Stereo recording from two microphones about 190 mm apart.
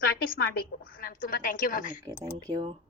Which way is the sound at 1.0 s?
45° left (ahead or behind).